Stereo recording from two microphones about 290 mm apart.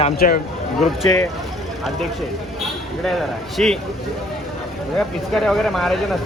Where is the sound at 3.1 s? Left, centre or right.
Centre.